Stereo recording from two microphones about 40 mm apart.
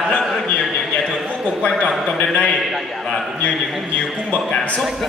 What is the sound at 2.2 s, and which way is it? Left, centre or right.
Speech, left.